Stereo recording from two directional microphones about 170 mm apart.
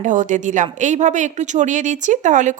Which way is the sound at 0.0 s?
50° right (ahead or behind).